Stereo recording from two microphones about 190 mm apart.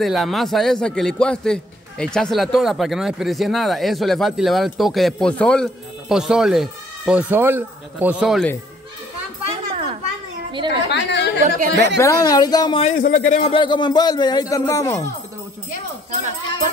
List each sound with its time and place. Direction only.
0.0 s a man's voice: centre (ahead or behind)
10.9 s speech: 65° left (ahead or behind)
11.4 s speech: 45° right (ahead or behind)
11.7 s a woman's voice: 65° right (ahead or behind)
12.0 s a man's voice: 15° left (ahead or behind)
12.8 s a man's voice: 45° left (ahead or behind)
13.3 s a man's voice: 30° left (ahead or behind)
16.1 s speech: 40° right (ahead or behind)